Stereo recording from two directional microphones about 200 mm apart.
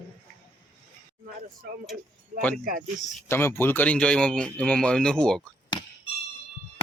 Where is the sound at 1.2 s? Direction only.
45° right (ahead or behind).